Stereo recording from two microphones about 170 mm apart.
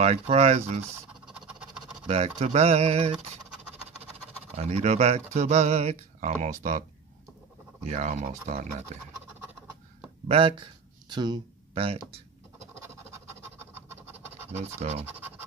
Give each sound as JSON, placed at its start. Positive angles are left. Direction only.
{"t": 0.0, "sound": "speech", "side_deg": -35}
{"t": 1.2, "sound": "a sound", "side_deg": -5}
{"t": 2.0, "sound": "speech", "side_deg": -35}
{"t": 4.6, "sound": "speech", "side_deg": -40}
{"t": 7.8, "sound": "speech", "side_deg": -45}
{"t": 10.2, "sound": "speech", "side_deg": -30}
{"t": 12.8, "sound": "scratch", "side_deg": -15}
{"t": 14.8, "sound": "speech", "side_deg": -40}